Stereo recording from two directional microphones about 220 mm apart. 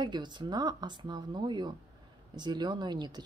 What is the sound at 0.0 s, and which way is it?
Speech, 20° right (ahead or behind).